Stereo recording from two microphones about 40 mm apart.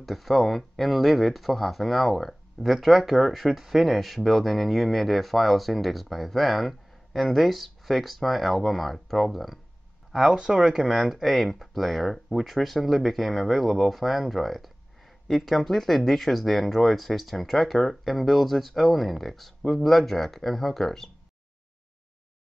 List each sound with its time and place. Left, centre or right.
0.0 s speech: centre
10.3 s speech: centre
10.9 s speech: centre